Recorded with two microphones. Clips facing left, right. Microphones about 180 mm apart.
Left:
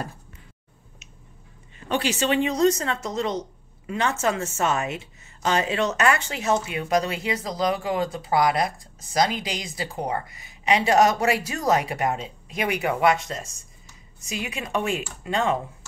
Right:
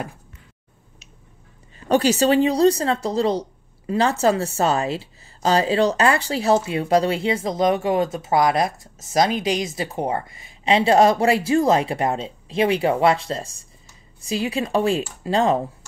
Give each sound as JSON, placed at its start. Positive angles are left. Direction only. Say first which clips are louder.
{"t": 1.9, "sound": "a woman's voice", "louder": "right 7 dB", "side_deg": -40}